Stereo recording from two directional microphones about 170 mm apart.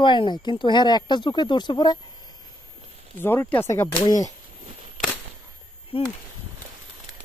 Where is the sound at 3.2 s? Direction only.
15° left (ahead or behind).